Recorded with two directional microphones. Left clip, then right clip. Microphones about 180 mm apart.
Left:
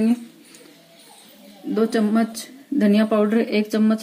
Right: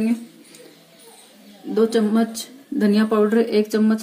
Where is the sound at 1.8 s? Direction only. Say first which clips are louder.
Right 2 dB; 30° left (ahead or behind).